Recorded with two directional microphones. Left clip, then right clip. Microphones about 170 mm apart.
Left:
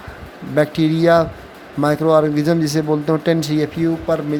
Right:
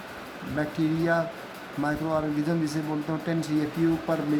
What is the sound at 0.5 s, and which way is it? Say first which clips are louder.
Speech: left 11 dB; 55° left (ahead or behind).